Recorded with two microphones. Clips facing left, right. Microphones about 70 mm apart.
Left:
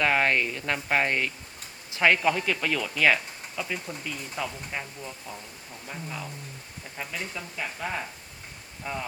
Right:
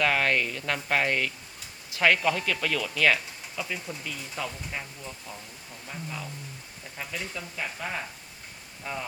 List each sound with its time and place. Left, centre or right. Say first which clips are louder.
0.0 s speech: left 1 dB; left
2.9 s speech: left 1 dB; centre